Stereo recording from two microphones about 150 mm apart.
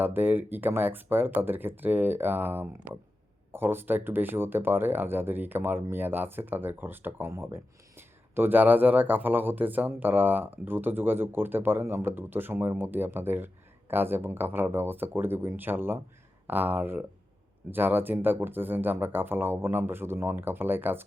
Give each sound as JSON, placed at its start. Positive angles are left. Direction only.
{"t": 0.0, "sound": "speech", "side_deg": -10}